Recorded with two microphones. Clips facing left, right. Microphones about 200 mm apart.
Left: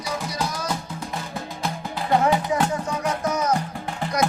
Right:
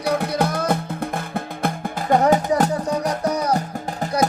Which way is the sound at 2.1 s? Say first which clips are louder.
Right 4 dB; 45° right (ahead or behind).